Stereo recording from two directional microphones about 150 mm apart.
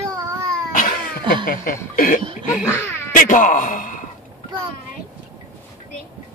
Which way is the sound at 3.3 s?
60° left (ahead or behind).